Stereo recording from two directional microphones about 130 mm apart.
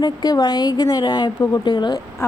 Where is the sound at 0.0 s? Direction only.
30° left (ahead or behind).